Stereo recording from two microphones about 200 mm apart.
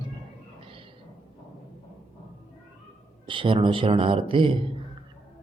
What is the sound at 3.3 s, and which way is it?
A man's voice, 25° right (ahead or behind).